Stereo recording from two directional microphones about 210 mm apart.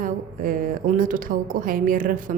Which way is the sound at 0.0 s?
40° right (ahead or behind).